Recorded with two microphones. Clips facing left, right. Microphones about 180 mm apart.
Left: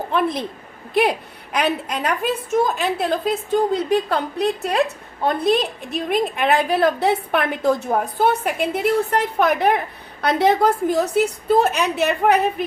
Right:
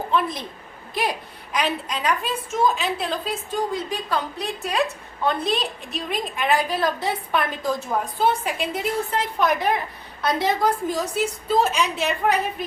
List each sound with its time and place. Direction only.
0.1 s a woman's voice: 60° left (ahead or behind)
1.5 s a woman's voice: 60° left (ahead or behind)
3.7 s a woman's voice: 65° left (ahead or behind)